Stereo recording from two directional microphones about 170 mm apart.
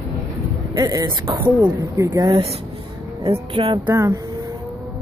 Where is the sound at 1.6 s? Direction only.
10° right (ahead or behind).